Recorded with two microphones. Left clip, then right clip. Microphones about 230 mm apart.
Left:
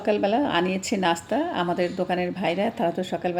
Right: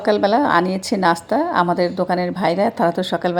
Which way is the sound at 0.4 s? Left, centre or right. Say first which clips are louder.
Right 7 dB; centre.